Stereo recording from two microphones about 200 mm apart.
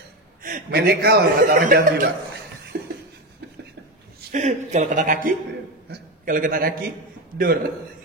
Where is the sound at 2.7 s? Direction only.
55° right (ahead or behind).